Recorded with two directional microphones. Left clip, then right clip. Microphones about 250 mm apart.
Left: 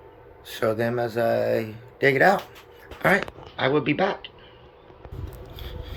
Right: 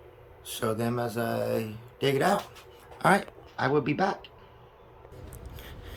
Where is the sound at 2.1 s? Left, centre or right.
Right.